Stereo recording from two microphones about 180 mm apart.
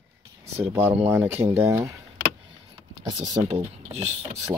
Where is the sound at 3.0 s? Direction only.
20° right (ahead or behind).